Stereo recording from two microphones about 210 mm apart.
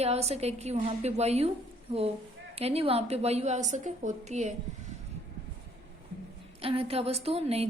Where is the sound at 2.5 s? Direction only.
30° right (ahead or behind).